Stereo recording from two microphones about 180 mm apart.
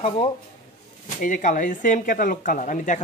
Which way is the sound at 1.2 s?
45° left (ahead or behind).